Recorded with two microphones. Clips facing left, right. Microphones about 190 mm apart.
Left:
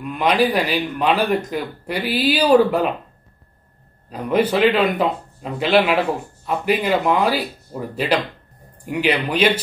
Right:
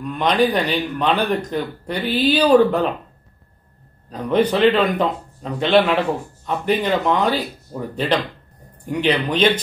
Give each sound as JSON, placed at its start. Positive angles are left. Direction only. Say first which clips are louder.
{"t": 0.0, "sound": "speech", "louder": "even", "side_deg": 5}
{"t": 4.1, "sound": "speech", "louder": "even", "side_deg": 10}